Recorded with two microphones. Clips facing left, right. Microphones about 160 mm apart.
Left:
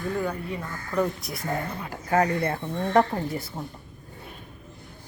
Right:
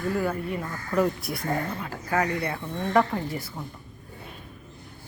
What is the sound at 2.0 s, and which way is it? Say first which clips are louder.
A woman's voice: left 3 dB; 30° left (ahead or behind).